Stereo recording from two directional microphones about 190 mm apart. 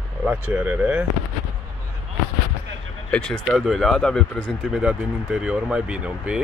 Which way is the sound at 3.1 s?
5° left (ahead or behind).